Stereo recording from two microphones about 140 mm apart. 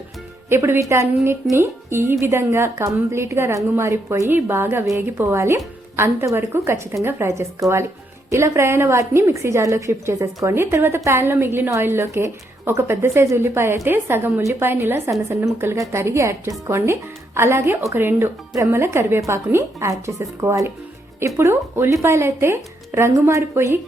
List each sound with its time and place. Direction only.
0.5 s a woman's voice: 20° right (ahead or behind)